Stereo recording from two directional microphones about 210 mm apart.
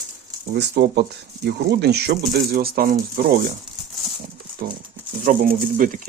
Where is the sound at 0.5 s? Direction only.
50° right (ahead or behind).